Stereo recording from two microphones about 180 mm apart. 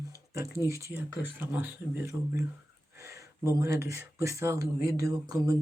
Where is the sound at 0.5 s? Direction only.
15° right (ahead or behind).